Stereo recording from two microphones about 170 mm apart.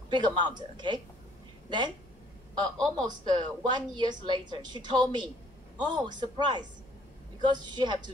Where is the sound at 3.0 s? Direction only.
25° right (ahead or behind).